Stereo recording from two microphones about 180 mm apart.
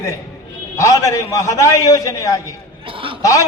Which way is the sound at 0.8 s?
15° left (ahead or behind).